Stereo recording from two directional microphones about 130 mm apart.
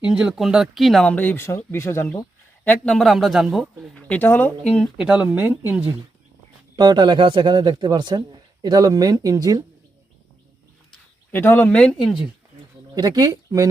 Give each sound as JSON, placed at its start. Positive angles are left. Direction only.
{"t": 0.0, "sound": "a man's voice", "side_deg": -10}
{"t": 1.1, "sound": "speech", "side_deg": 15}
{"t": 2.6, "sound": "a man's voice", "side_deg": 5}
{"t": 4.1, "sound": "speech", "side_deg": 15}
{"t": 4.9, "sound": "speech", "side_deg": -10}
{"t": 6.7, "sound": "a man's voice", "side_deg": -35}
{"t": 11.3, "sound": "speech", "side_deg": 15}
{"t": 13.0, "sound": "speech", "side_deg": -30}